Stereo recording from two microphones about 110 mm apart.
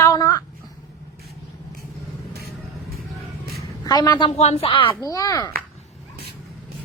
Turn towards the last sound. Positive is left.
turn(degrees=30)  # may be behind; listen again after turning